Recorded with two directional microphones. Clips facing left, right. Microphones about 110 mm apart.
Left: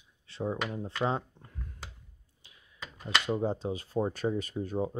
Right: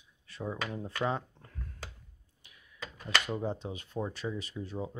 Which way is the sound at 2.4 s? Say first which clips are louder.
Right 1 dB; 25° left (ahead or behind).